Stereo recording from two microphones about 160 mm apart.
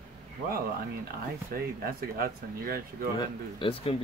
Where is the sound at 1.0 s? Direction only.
70° right (ahead or behind).